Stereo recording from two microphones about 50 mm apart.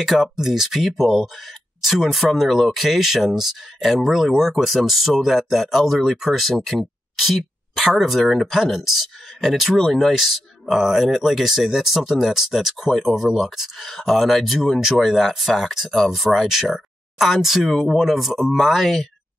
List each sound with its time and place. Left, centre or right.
0.0 s speech: centre
9.8 s speech: centre